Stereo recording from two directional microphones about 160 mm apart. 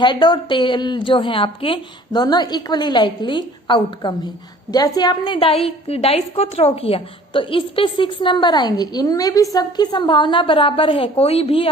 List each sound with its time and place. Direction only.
0.0 s a woman's voice: 30° left (ahead or behind)